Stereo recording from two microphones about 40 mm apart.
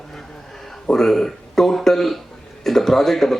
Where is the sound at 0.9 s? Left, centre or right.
Centre.